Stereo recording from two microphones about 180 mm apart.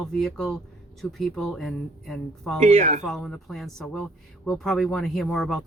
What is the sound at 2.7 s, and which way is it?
Speech, 40° right (ahead or behind).